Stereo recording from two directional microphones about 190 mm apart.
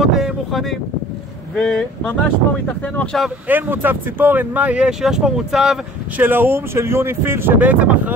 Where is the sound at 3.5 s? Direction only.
10° right (ahead or behind).